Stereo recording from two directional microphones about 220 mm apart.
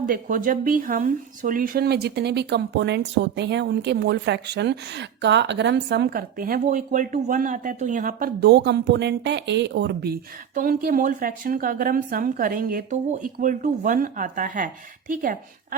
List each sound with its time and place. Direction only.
0.0 s speech: 40° right (ahead or behind)